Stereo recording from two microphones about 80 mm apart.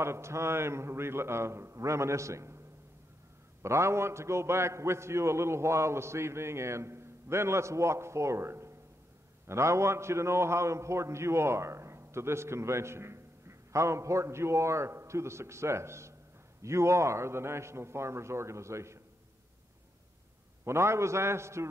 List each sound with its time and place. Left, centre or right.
0.0 s a man's voice: right
3.6 s a man's voice: right
20.6 s a man's voice: right